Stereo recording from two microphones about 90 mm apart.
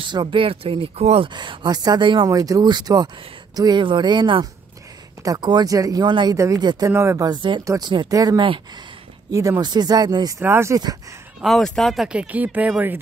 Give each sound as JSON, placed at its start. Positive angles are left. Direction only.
{"t": 0.0, "sound": "speech", "side_deg": -60}
{"t": 2.2, "sound": "speech", "side_deg": -40}
{"t": 3.8, "sound": "speech", "side_deg": -60}
{"t": 6.0, "sound": "speech", "side_deg": -60}
{"t": 6.3, "sound": "speech", "side_deg": -35}
{"t": 6.6, "sound": "speech", "side_deg": -50}
{"t": 6.9, "sound": "speech", "side_deg": -30}
{"t": 7.2, "sound": "speech", "side_deg": -65}
{"t": 8.1, "sound": "speech", "side_deg": -45}
{"t": 9.6, "sound": "speech", "side_deg": -50}
{"t": 10.4, "sound": "speech", "side_deg": -30}
{"t": 11.4, "sound": "speech", "side_deg": 5}
{"t": 12.1, "sound": "speech", "side_deg": -15}